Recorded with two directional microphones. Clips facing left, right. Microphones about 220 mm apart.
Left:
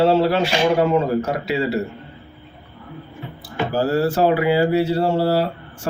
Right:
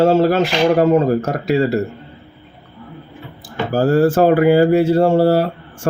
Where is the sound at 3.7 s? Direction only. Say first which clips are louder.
Right 6 dB; 50° right (ahead or behind).